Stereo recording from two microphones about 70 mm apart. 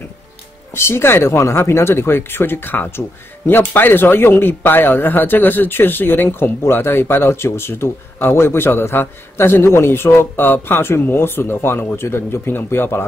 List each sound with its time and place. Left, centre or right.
0.7 s speech: left